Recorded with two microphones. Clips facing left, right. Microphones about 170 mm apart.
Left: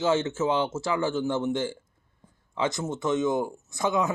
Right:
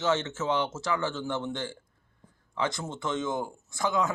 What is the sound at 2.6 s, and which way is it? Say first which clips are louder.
Speech: left 4 dB; 20° left (ahead or behind).